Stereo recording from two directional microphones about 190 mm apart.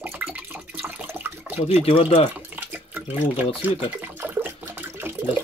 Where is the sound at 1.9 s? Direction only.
30° left (ahead or behind).